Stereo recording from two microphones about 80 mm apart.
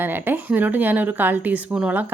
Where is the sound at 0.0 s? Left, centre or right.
Right.